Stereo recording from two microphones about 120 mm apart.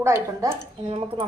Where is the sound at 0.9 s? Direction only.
55° right (ahead or behind).